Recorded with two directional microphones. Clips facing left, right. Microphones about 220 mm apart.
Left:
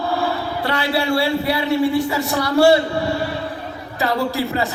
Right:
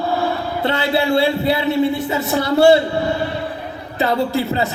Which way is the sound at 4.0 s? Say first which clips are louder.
Right 2 dB; 25° right (ahead or behind).